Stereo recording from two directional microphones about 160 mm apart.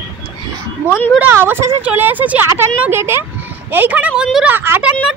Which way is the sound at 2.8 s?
15° right (ahead or behind).